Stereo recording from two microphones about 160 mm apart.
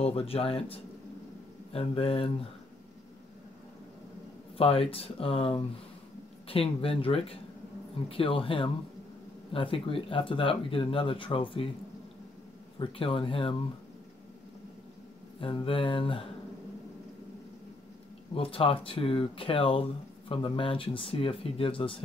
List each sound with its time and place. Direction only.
0.0 s speech: 40° left (ahead or behind)
4.6 s speech: 35° left (ahead or behind)
12.7 s speech: 35° left (ahead or behind)
15.4 s speech: 35° left (ahead or behind)
18.3 s speech: 35° left (ahead or behind)